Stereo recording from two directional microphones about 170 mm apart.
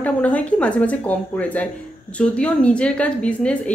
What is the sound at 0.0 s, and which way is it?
A woman's voice, 10° left (ahead or behind).